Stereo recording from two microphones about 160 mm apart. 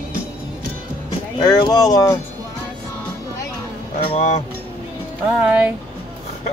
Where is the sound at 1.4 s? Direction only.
25° left (ahead or behind).